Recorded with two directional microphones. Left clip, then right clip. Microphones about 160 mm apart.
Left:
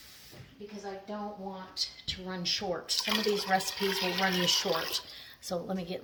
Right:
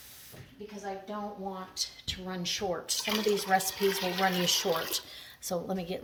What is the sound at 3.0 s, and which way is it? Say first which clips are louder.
Speech: right 2 dB; 5° left (ahead or behind).